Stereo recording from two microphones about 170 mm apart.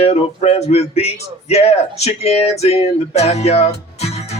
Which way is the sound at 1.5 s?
40° left (ahead or behind).